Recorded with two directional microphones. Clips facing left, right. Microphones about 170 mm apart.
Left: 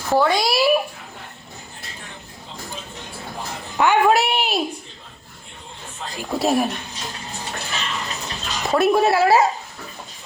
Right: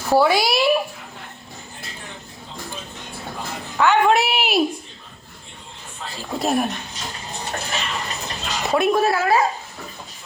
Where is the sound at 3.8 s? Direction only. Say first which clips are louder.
Even; 10° left (ahead or behind).